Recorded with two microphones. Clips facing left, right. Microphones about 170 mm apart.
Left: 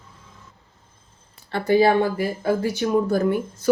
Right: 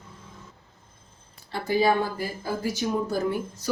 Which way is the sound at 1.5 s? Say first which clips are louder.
Left 6 dB; 65° left (ahead or behind).